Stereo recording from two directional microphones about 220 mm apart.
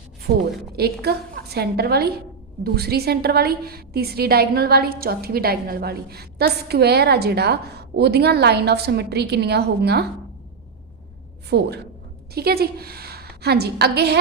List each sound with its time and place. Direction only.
0.3 s a woman's voice: 45° right (ahead or behind)
11.4 s a woman's voice: 50° right (ahead or behind)